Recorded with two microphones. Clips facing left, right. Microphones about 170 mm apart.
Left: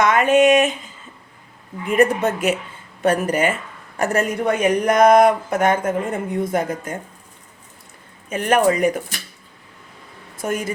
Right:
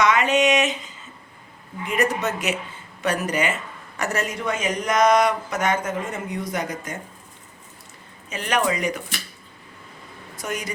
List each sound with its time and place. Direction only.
0.0 s speech: 50° left (ahead or behind)
1.9 s speech: 55° left (ahead or behind)
8.3 s speech: 50° left (ahead or behind)
10.3 s speech: 50° left (ahead or behind)